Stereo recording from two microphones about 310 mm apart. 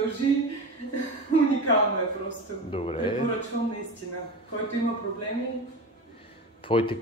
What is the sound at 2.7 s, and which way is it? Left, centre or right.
Speech, centre.